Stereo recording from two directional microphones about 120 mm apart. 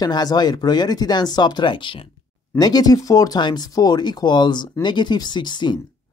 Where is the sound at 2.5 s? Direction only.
35° left (ahead or behind).